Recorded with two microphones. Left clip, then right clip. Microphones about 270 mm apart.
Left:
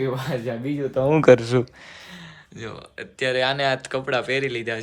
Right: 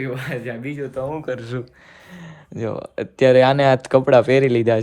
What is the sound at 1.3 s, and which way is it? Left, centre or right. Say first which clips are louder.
Speech: left 12 dB; centre.